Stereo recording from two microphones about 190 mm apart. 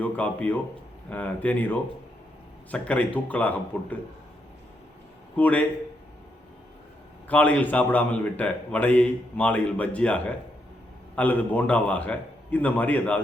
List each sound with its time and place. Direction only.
0.0 s a man's voice: 5° left (ahead or behind)
5.4 s a man's voice: 10° left (ahead or behind)
7.3 s a man's voice: 10° left (ahead or behind)